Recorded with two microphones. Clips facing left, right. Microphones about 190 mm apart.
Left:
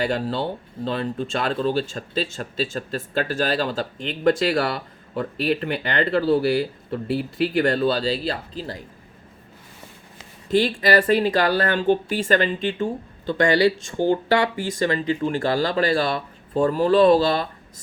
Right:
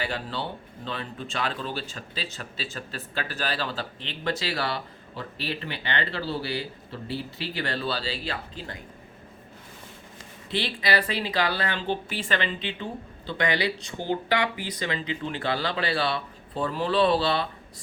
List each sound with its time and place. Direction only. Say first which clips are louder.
0.0 s speech: left 8 dB; 40° left (ahead or behind)
10.5 s speech: left 8 dB; 45° left (ahead or behind)